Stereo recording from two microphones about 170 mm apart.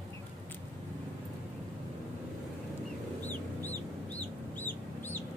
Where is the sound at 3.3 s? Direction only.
10° left (ahead or behind).